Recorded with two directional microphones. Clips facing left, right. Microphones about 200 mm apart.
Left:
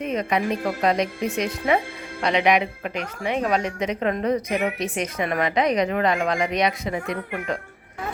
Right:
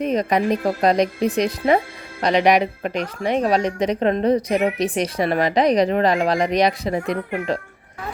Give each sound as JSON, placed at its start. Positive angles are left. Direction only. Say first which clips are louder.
{"t": 0.0, "sound": "a woman's voice", "louder": "right 4 dB", "side_deg": -35}